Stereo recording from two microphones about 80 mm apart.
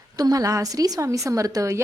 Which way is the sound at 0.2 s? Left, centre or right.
Right.